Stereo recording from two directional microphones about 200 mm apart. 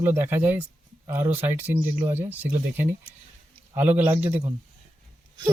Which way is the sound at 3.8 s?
10° right (ahead or behind).